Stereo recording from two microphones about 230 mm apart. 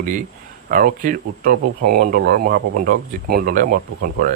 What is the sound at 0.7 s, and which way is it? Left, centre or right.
Speech, right.